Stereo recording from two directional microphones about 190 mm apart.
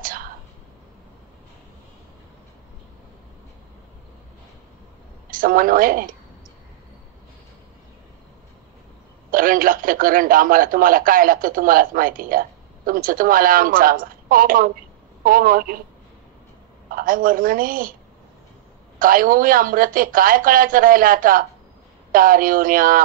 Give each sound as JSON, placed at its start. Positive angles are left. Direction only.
{"t": 0.0, "sound": "whispering", "side_deg": -50}
{"t": 5.3, "sound": "a woman's voice", "side_deg": -45}
{"t": 9.3, "sound": "speech", "side_deg": -45}
{"t": 16.9, "sound": "speech", "side_deg": -45}
{"t": 18.9, "sound": "speech", "side_deg": -45}